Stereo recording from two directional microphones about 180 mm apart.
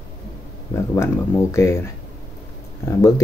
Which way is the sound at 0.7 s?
15° left (ahead or behind).